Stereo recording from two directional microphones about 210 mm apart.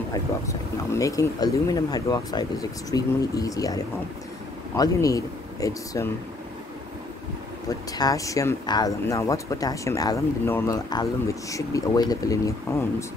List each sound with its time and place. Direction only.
0.1 s speech: 15° left (ahead or behind)
8.0 s speech: 15° left (ahead or behind)